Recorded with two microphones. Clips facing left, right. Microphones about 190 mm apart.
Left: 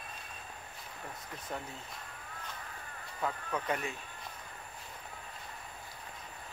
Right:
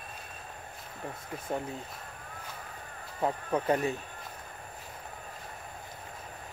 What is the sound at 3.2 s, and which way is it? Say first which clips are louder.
Speech: right 7 dB; 35° right (ahead or behind).